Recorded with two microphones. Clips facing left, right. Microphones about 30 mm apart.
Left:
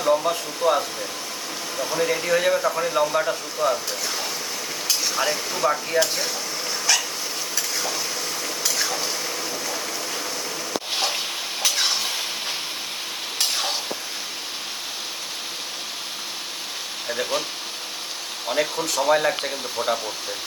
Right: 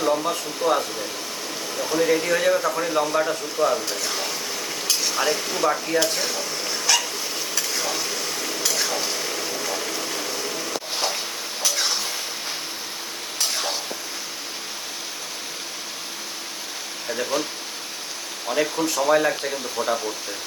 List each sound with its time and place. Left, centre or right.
0.1 s speech: centre
4.9 s stir: centre
11.6 s a sound: left
17.1 s speech: left
18.4 s speech: centre